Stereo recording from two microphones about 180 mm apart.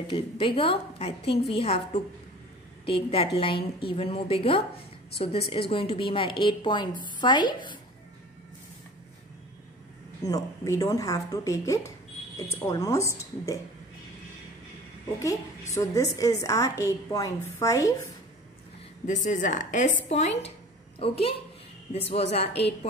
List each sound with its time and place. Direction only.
0.1 s a woman's voice: 30° left (ahead or behind)
2.8 s a woman's voice: 30° left (ahead or behind)
10.2 s a woman's voice: 20° left (ahead or behind)
15.1 s a woman's voice: 15° left (ahead or behind)
19.0 s a woman's voice: 45° left (ahead or behind)